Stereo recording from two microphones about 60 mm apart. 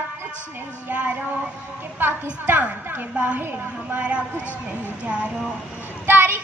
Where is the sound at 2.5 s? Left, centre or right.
Right.